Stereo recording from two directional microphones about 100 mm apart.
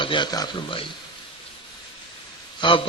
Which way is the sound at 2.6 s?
55° left (ahead or behind).